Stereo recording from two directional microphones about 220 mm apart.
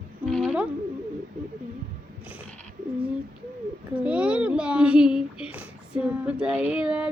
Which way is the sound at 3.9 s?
5° right (ahead or behind).